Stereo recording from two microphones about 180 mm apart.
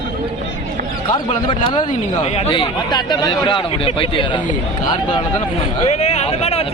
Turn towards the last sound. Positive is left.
turn(degrees=35)  # may be behind; listen again after turning